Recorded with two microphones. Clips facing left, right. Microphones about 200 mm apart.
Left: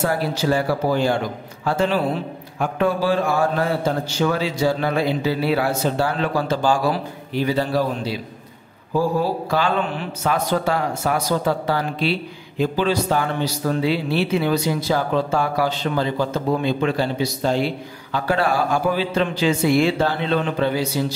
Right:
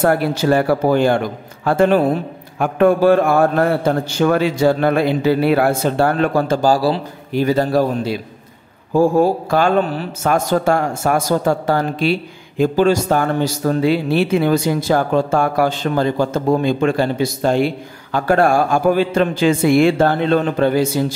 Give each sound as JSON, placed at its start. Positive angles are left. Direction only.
{"t": 0.0, "sound": "a man's voice", "side_deg": -55}
{"t": 7.3, "sound": "speech", "side_deg": -45}